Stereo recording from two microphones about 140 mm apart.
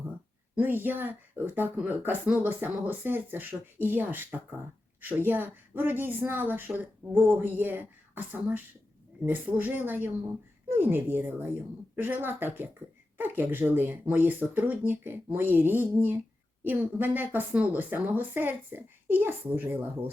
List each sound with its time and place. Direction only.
0.5 s speech: 15° right (ahead or behind)